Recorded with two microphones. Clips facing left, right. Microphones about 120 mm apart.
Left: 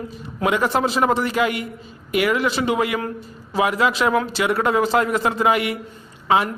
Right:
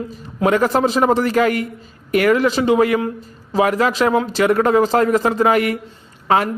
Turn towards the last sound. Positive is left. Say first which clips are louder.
# right 2 dB
turn(degrees=-50)  # may be behind; listen again after turning